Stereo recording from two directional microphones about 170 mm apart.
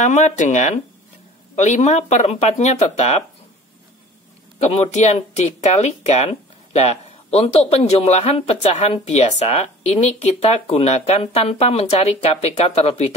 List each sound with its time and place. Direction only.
0.0 s speech: 45° left (ahead or behind)
4.6 s speech: 35° left (ahead or behind)